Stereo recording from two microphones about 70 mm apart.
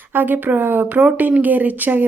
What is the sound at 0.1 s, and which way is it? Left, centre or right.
Speech, right.